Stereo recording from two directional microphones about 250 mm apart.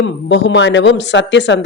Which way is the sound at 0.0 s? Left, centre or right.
Left.